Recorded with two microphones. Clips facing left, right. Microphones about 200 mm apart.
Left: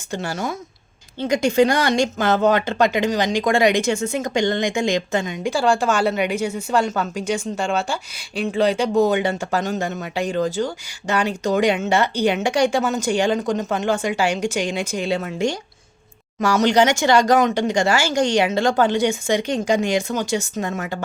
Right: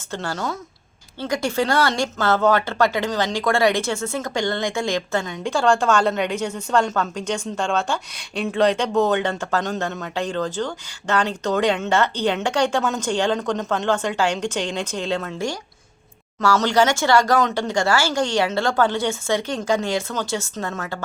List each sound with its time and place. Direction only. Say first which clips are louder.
0.1 s speech: left 1 dB; 10° left (ahead or behind)